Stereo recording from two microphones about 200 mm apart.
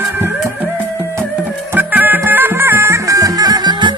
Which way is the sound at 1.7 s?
10° right (ahead or behind).